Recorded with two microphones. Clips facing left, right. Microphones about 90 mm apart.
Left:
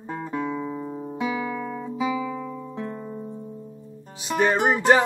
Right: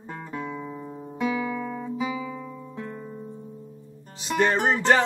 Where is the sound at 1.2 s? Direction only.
5° left (ahead or behind).